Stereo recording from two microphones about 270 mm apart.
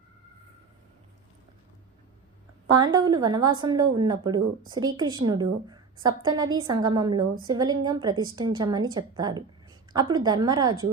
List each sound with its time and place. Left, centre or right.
2.7 s a woman's voice: centre